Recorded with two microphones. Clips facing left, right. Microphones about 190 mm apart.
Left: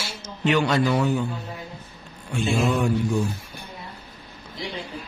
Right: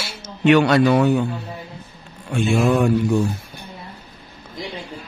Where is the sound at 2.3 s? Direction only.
60° right (ahead or behind).